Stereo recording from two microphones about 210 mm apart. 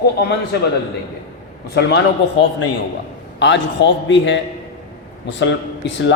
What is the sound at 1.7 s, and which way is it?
Speech, 55° left (ahead or behind).